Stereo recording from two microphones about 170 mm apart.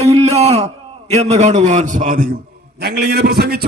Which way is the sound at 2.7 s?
70° right (ahead or behind).